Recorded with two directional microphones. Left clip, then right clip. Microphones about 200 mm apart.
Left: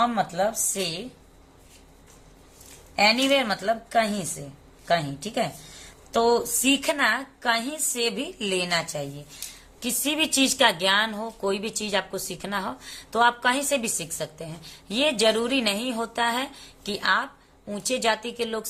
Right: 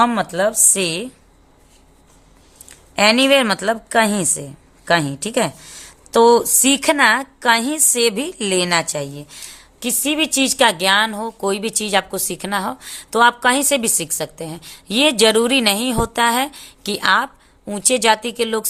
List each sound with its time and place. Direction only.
0.0 s a woman's voice: 55° right (ahead or behind)
2.9 s a woman's voice: 50° right (ahead or behind)
9.8 s a woman's voice: 30° right (ahead or behind)